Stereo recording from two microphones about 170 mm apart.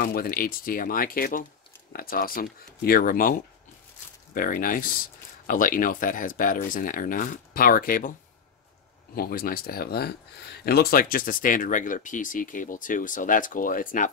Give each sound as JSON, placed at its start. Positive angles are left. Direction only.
{"t": 0.0, "sound": "speech", "side_deg": 60}
{"t": 9.1, "sound": "speech", "side_deg": 60}